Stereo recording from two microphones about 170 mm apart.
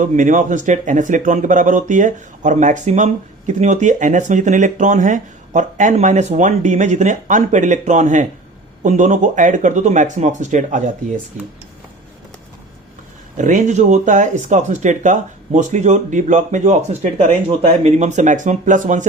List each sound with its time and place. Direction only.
0.0 s speech: 50° right (ahead or behind)
13.3 s speech: 45° right (ahead or behind)